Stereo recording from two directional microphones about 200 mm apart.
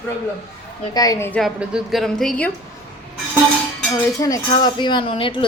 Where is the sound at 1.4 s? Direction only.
Centre (ahead or behind).